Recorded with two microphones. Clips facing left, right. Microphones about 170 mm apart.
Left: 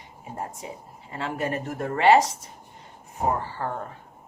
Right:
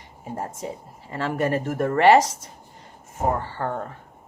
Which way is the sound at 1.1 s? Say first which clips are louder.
Right 4 dB; 65° right (ahead or behind).